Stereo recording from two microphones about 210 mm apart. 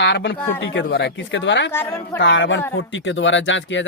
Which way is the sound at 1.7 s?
10° left (ahead or behind).